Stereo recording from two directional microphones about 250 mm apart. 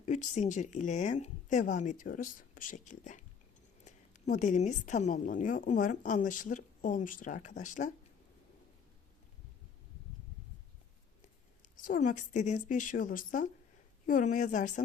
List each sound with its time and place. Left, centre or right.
0.0 s a woman's voice: left
11.6 s a woman's voice: left